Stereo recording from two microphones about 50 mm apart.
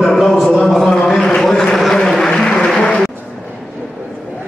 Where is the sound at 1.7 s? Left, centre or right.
Centre.